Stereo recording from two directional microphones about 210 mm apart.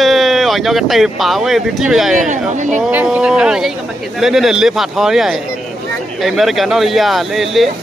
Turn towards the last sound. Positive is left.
turn(degrees=0)  # may be behind; listen again after turning